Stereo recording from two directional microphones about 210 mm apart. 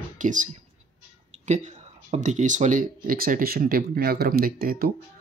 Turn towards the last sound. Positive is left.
turn(degrees=-45)  # may be behind; listen again after turning